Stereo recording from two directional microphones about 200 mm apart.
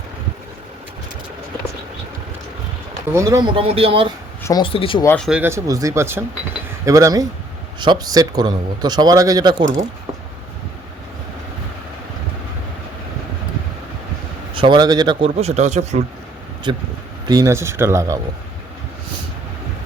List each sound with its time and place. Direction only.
3.1 s speech: 15° right (ahead or behind)
4.4 s speech: 20° left (ahead or behind)
5.0 s speech: 5° left (ahead or behind)
5.3 s speech: 10° right (ahead or behind)
14.5 s speech: 25° right (ahead or behind)
16.7 s speech: 25° right (ahead or behind)